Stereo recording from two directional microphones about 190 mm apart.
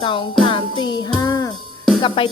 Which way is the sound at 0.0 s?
25° left (ahead or behind).